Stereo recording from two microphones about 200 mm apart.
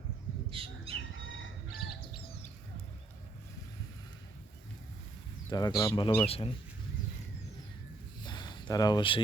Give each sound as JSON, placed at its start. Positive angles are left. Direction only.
{"t": 0.6, "sound": "bird", "side_deg": -25}
{"t": 1.1, "sound": "chicken", "side_deg": 75}
{"t": 1.7, "sound": "bird", "side_deg": 50}
{"t": 5.5, "sound": "speech", "side_deg": 20}
{"t": 8.2, "sound": "a sound", "side_deg": 20}